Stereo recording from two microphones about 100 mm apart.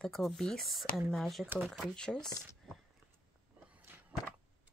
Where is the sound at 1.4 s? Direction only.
15° right (ahead or behind).